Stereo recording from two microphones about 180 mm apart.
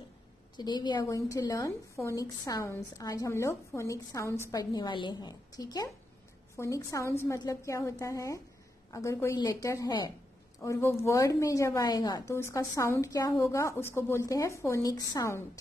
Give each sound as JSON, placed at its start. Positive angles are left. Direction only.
{"t": 0.6, "sound": "a woman's voice", "side_deg": 25}